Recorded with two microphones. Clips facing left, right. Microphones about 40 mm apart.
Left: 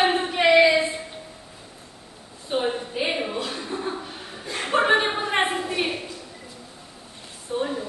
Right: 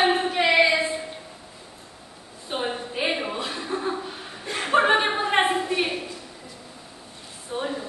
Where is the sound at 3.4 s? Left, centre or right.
Right.